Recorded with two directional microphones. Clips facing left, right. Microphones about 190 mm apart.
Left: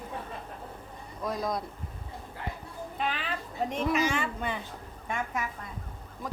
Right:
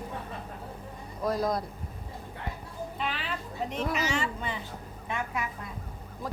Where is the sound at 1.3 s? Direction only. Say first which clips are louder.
Right 3 dB; centre (ahead or behind).